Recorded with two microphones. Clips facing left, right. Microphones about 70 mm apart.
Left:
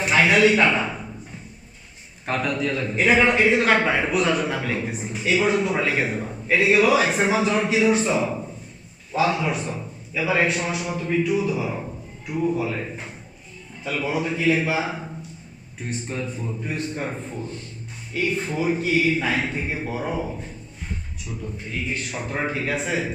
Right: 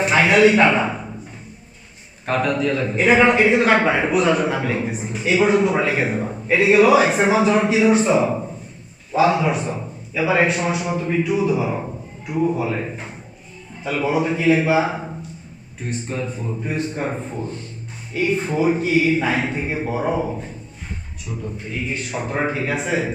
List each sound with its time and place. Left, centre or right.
0.0 s speech: centre
2.3 s a man's voice: centre
2.9 s a man's voice: centre
16.2 s a man's voice: centre
22.1 s a man's voice: centre